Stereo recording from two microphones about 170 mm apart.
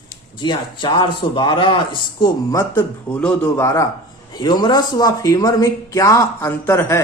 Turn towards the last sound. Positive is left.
turn(degrees=15)  # may be behind; listen again after turning